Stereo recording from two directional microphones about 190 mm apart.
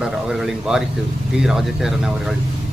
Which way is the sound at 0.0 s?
Centre (ahead or behind).